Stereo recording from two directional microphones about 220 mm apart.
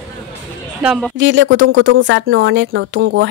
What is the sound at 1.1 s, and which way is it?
Speech, 60° right (ahead or behind).